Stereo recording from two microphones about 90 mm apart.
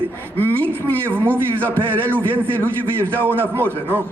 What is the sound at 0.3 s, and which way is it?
Speech, 15° left (ahead or behind).